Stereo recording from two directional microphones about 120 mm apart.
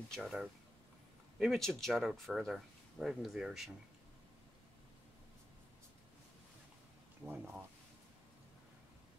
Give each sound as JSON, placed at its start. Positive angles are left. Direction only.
{"t": 0.1, "sound": "speech", "side_deg": 0}
{"t": 7.2, "sound": "speech", "side_deg": -15}